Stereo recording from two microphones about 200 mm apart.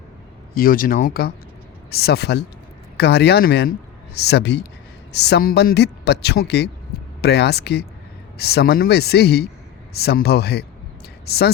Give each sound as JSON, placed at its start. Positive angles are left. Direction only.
{"t": 0.5, "sound": "speech", "side_deg": 45}